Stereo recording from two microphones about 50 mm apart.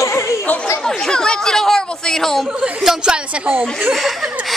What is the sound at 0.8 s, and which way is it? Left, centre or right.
Chatter, centre.